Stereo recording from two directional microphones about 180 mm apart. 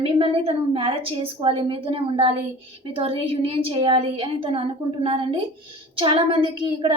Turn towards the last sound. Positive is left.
turn(degrees=-25)  # may be behind; listen again after turning